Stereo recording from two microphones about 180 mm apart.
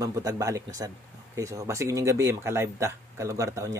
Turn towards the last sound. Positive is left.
turn(degrees=-15)  # may be behind; listen again after turning